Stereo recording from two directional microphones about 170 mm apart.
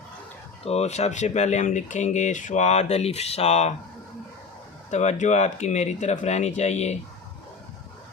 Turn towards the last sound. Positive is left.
turn(degrees=40)  # may be behind; listen again after turning